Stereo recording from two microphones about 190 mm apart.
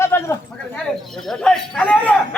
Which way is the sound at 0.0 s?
15° left (ahead or behind).